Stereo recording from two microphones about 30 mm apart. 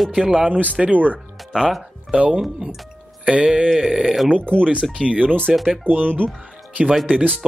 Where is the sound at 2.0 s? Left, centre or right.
Right.